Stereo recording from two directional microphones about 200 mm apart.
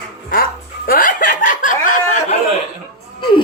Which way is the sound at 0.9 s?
45° left (ahead or behind).